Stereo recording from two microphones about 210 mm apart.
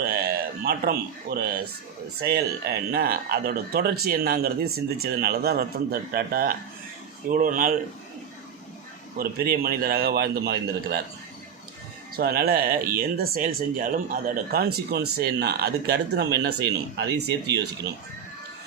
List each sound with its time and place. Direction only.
0.6 s speech: 45° right (ahead or behind)
9.1 s speech: 45° right (ahead or behind)
12.1 s speech: 45° right (ahead or behind)